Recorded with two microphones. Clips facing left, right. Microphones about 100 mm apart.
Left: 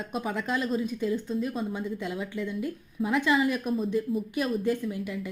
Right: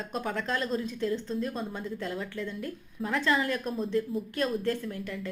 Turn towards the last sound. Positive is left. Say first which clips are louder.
# left 3 dB
turn(degrees=10)  # may be behind; listen again after turning